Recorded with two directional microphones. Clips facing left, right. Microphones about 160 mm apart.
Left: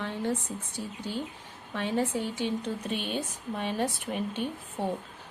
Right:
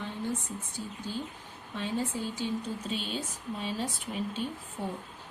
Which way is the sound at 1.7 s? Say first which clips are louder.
Left 4 dB; 70° left (ahead or behind).